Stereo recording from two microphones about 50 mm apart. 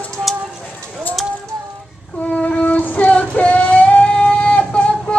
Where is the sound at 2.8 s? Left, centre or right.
Left.